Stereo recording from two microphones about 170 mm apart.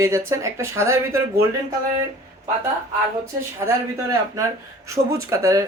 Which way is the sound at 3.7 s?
20° right (ahead or behind).